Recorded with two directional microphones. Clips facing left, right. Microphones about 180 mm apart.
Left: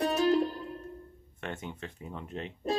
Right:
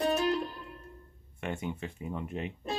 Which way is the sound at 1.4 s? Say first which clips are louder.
Right 3 dB; 10° right (ahead or behind).